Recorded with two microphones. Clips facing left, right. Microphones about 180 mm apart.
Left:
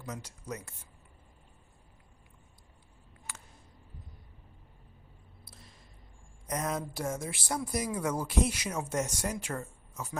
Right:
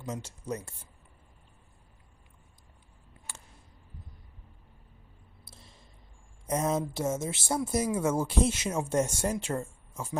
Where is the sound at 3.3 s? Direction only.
30° right (ahead or behind).